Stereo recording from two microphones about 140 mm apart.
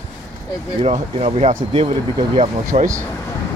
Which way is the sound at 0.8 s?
45° right (ahead or behind).